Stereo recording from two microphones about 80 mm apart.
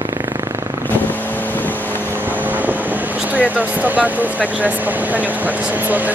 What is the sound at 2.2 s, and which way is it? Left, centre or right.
Vehicle, right.